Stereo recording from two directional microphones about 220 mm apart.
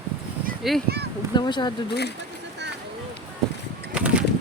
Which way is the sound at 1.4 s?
20° left (ahead or behind).